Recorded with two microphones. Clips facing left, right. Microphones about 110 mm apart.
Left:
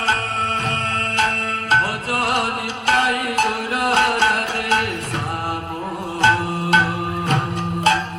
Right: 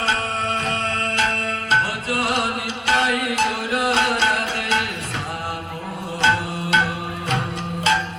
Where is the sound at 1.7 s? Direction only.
50° left (ahead or behind).